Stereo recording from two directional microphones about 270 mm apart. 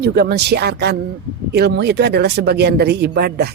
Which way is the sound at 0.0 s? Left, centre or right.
Right.